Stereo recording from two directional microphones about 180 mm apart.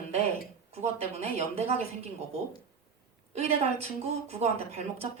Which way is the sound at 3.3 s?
35° right (ahead or behind).